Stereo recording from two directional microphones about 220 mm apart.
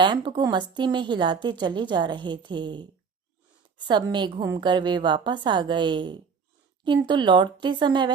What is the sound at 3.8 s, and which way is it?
A woman's voice, 20° right (ahead or behind).